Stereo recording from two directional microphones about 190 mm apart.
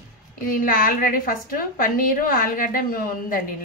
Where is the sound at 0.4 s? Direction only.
45° left (ahead or behind).